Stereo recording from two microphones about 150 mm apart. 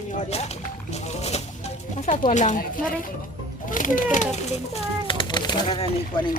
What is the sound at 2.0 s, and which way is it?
Speech, 55° left (ahead or behind).